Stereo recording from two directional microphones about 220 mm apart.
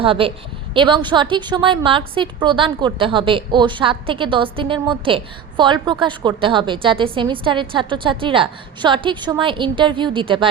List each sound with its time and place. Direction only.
0.0 s a woman's voice: 25° right (ahead or behind)